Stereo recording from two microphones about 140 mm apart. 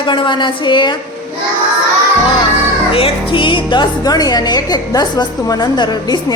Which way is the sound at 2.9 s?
40° left (ahead or behind).